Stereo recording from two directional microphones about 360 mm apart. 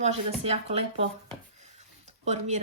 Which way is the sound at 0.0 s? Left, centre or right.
Centre.